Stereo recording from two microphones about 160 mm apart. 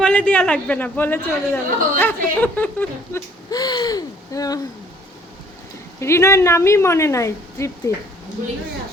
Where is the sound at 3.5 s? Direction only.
25° left (ahead or behind).